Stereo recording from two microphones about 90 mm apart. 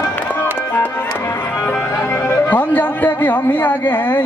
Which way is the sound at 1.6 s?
25° left (ahead or behind).